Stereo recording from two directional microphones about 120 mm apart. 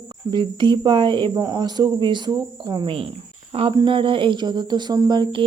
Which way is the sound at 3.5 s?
55° right (ahead or behind).